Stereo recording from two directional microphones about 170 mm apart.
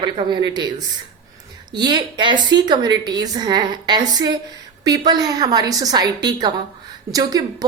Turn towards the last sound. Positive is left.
turn(degrees=-20)  # may be behind; listen again after turning